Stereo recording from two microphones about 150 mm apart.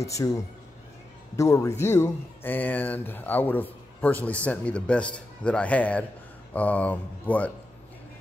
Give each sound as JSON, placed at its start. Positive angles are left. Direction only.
{"t": 0.0, "sound": "a man's voice", "side_deg": 20}